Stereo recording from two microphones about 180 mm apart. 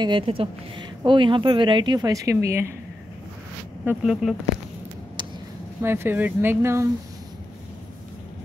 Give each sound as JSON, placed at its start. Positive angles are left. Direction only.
{"t": 0.0, "sound": "speech", "side_deg": -30}
{"t": 3.8, "sound": "speech", "side_deg": -5}
{"t": 5.8, "sound": "speech", "side_deg": -15}